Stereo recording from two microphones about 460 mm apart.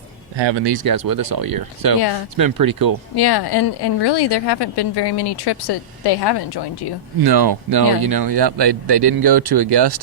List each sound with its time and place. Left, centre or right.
0.3 s speech: right
3.2 s a woman's voice: left
7.2 s speech: right